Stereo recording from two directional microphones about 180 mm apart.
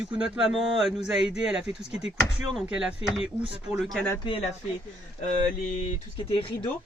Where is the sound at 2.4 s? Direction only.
5° right (ahead or behind).